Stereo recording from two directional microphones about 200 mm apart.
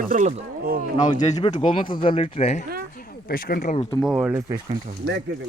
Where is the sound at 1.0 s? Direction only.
35° left (ahead or behind).